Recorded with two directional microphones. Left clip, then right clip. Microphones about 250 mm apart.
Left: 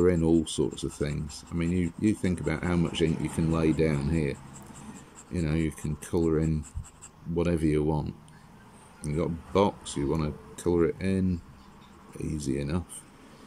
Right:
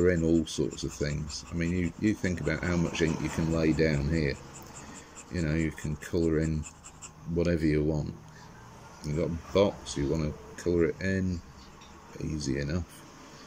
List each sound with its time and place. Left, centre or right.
0.0 s speech: centre